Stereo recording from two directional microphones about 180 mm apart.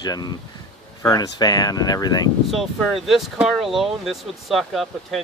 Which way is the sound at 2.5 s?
Centre (ahead or behind).